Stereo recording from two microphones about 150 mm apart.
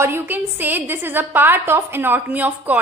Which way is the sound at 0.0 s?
15° right (ahead or behind).